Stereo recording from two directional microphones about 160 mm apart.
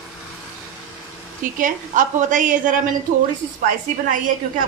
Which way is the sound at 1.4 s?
55° right (ahead or behind).